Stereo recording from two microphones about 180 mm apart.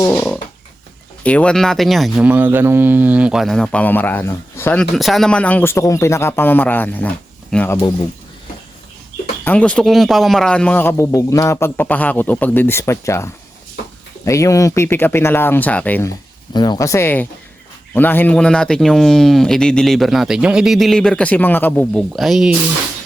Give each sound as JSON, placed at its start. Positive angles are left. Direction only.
{"t": 0.1, "sound": "a sound", "side_deg": 5}
{"t": 1.2, "sound": "speech", "side_deg": 5}
{"t": 9.4, "sound": "speech", "side_deg": 10}
{"t": 16.5, "sound": "speech", "side_deg": 25}